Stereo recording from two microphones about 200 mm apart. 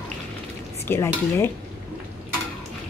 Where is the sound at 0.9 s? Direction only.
10° left (ahead or behind).